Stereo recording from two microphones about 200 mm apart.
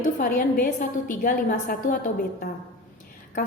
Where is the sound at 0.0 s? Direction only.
40° left (ahead or behind).